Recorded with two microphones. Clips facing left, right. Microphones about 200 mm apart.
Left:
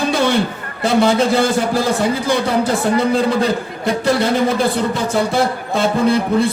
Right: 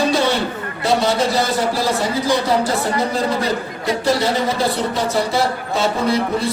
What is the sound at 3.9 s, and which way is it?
Speech, 55° left (ahead or behind).